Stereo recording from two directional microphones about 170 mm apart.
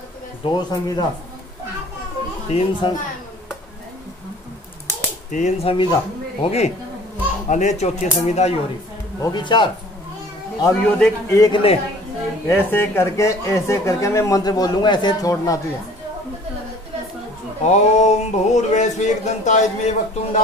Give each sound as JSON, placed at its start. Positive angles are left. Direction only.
{"t": 0.4, "sound": "speech", "side_deg": 25}
{"t": 2.5, "sound": "speech", "side_deg": 25}
{"t": 5.3, "sound": "speech", "side_deg": 40}
{"t": 9.2, "sound": "speech", "side_deg": 25}
{"t": 10.6, "sound": "speech", "side_deg": 10}
{"t": 11.5, "sound": "speech", "side_deg": 35}
{"t": 12.4, "sound": "speech", "side_deg": 10}
{"t": 17.6, "sound": "speech", "side_deg": 45}